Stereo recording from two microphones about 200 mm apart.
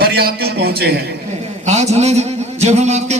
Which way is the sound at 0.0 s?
50° right (ahead or behind).